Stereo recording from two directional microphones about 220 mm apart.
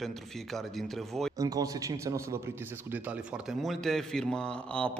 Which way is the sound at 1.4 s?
15° right (ahead or behind).